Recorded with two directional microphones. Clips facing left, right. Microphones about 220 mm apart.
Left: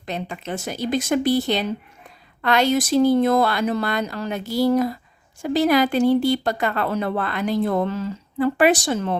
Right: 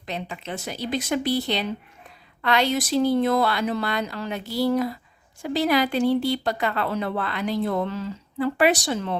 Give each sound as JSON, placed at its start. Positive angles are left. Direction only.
{"t": 0.0, "sound": "a woman's voice", "side_deg": 45}